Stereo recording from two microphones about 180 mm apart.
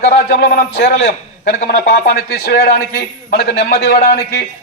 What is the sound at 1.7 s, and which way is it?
A man's voice, 60° left (ahead or behind).